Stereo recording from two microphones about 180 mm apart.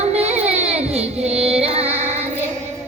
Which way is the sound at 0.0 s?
35° right (ahead or behind).